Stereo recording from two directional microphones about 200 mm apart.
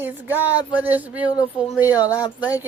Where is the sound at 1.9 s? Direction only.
20° left (ahead or behind).